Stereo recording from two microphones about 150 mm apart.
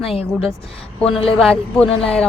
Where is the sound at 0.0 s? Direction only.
40° left (ahead or behind).